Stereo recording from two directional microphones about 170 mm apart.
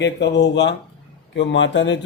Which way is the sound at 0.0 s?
90° left.